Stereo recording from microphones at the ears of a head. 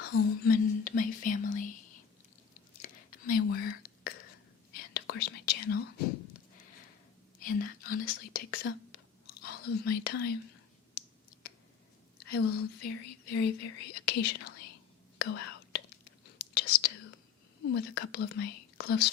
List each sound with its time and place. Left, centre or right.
0.0 s whispering: left
12.1 s whispering: left